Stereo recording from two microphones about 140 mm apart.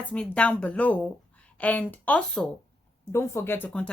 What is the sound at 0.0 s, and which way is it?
Speech, 10° left (ahead or behind).